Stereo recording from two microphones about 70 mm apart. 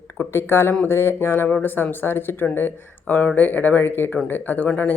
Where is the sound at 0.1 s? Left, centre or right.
Left.